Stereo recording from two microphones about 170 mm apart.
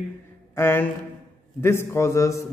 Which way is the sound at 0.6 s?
15° left (ahead or behind).